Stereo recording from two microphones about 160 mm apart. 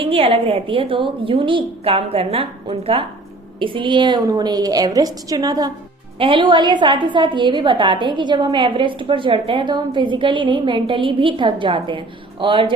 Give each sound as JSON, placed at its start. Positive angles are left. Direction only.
{"t": 0.0, "sound": "a woman's voice", "side_deg": -35}